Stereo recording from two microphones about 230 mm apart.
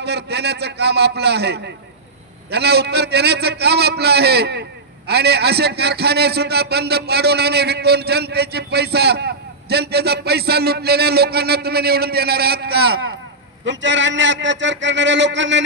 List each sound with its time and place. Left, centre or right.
0.0 s a man's voice: right